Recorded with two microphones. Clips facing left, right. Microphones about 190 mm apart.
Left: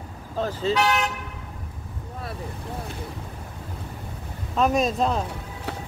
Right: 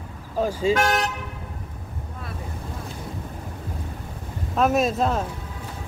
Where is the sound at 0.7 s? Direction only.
45° right (ahead or behind).